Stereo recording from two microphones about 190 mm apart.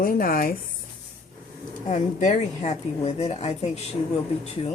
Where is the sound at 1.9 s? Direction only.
40° left (ahead or behind).